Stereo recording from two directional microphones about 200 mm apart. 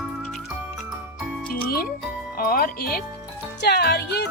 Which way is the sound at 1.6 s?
45° left (ahead or behind).